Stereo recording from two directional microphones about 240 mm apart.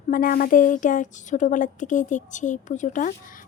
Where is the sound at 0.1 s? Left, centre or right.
Left.